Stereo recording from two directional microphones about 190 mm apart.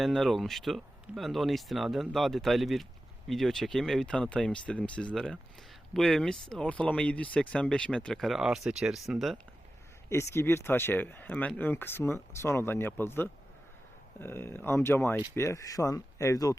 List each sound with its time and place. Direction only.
0.0 s speech: centre (ahead or behind)
10.1 s speech: 15° left (ahead or behind)